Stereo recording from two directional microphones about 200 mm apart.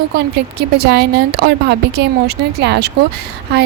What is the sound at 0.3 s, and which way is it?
A woman's voice, 55° right (ahead or behind).